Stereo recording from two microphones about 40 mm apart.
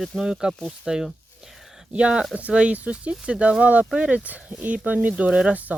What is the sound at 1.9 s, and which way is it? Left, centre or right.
Speech, right.